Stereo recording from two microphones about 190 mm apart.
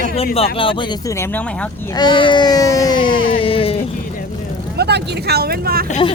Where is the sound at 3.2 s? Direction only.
25° left (ahead or behind).